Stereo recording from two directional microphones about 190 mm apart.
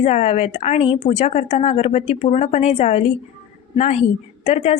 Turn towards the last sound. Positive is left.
turn(degrees=35)  # may be behind; listen again after turning